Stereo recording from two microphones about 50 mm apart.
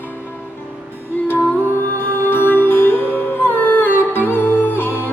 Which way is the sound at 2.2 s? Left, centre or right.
Left.